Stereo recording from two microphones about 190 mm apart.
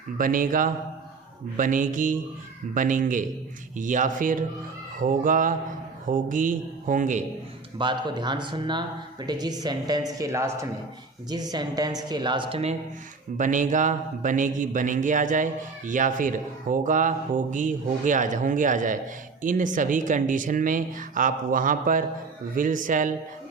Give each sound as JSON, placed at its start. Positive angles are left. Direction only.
{"t": 0.2, "sound": "speech", "side_deg": -45}
{"t": 7.8, "sound": "a woman's voice", "side_deg": -25}
{"t": 13.3, "sound": "speech", "side_deg": -40}